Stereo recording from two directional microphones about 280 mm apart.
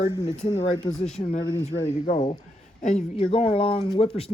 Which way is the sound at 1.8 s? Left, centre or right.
Left.